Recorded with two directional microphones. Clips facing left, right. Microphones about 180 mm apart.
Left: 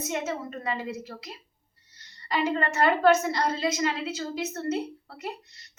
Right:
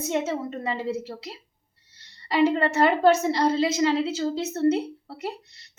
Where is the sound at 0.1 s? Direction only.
25° right (ahead or behind).